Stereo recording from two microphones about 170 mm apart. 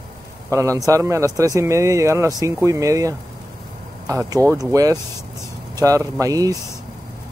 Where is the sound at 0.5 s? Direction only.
20° right (ahead or behind).